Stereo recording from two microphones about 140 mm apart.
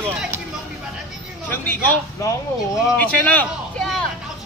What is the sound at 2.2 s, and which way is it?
Speech, 20° left (ahead or behind).